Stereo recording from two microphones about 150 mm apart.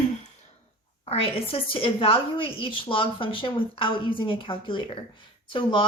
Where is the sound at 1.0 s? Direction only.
40° left (ahead or behind).